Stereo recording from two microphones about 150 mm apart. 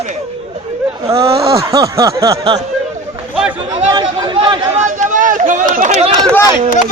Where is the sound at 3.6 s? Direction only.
30° right (ahead or behind).